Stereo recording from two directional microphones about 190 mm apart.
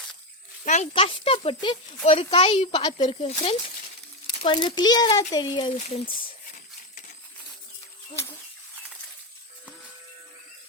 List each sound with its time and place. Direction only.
0.6 s speech: 40° left (ahead or behind)
4.4 s speech: 25° left (ahead or behind)